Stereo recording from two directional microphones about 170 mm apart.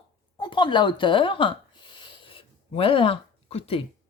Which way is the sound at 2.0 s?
30° left (ahead or behind).